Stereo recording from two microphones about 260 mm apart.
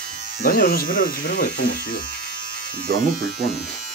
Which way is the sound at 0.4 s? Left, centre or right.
Left.